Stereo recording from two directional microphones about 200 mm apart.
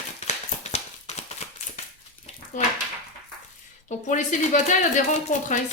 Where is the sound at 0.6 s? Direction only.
35° left (ahead or behind).